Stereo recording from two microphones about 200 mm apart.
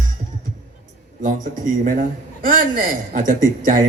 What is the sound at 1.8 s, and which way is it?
A woman's voice, 45° right (ahead or behind).